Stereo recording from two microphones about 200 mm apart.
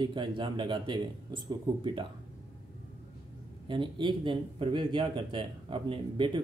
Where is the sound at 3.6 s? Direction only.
25° right (ahead or behind).